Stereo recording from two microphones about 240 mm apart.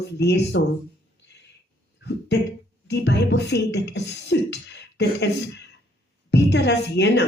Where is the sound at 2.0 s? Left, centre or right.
Left.